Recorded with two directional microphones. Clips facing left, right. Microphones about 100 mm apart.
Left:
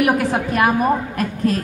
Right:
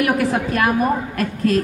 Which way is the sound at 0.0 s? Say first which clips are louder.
Left 1 dB; 25° left (ahead or behind).